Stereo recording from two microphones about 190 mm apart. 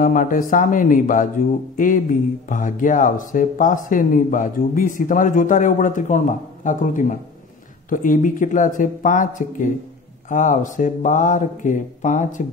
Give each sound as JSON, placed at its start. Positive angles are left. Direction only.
{"t": 0.0, "sound": "speech", "side_deg": 45}